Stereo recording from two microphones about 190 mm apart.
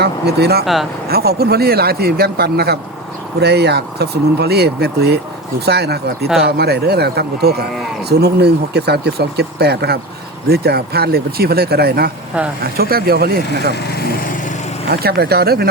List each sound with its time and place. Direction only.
0.0 s speech: 60° right (ahead or behind)
0.6 s speech: centre (ahead or behind)
1.1 s speech: 55° right (ahead or behind)
14.8 s speech: 55° right (ahead or behind)